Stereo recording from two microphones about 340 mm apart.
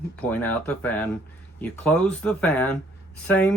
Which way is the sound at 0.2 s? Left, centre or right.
Centre.